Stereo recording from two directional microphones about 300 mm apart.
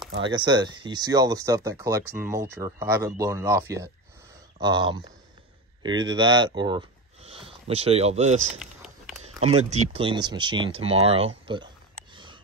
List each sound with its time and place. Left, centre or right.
0.2 s speech: centre
8.5 s a sound: centre
9.7 s speech: centre